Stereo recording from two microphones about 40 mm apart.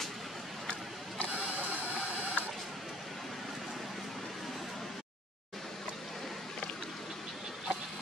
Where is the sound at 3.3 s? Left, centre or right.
Centre.